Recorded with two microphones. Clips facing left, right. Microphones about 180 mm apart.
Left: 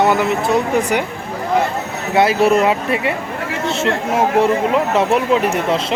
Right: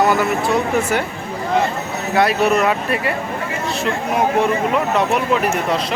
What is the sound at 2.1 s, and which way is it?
Speech, 25° left (ahead or behind).